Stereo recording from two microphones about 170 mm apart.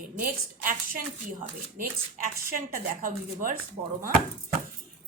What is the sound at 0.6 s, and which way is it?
Speech, 55° right (ahead or behind).